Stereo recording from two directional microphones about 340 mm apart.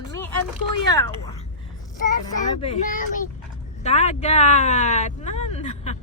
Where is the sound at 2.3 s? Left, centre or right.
Centre.